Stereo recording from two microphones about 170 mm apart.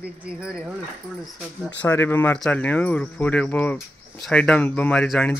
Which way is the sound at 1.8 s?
10° left (ahead or behind).